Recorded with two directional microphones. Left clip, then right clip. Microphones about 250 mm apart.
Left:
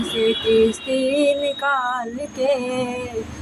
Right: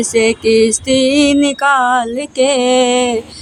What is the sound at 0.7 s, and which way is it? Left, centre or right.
Music, right.